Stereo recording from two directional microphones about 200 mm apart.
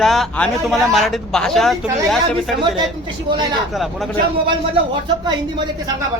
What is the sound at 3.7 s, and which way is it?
Speech, centre (ahead or behind).